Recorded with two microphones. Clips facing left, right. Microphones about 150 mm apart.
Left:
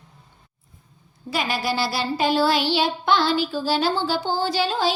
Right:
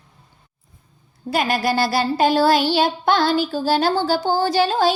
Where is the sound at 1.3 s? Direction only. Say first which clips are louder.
Right 5 dB; 50° right (ahead or behind).